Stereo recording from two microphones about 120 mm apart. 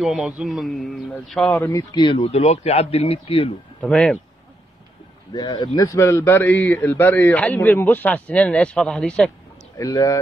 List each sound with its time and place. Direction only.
0.0 s a man's voice: 5° right (ahead or behind)
1.5 s a man's voice: 15° left (ahead or behind)
1.8 s a man's voice: 40° left (ahead or behind)
3.8 s a man's voice: 5° left (ahead or behind)
5.3 s a man's voice: 35° left (ahead or behind); by 9.3 s 10° left (ahead or behind)
9.8 s speech: 30° left (ahead or behind)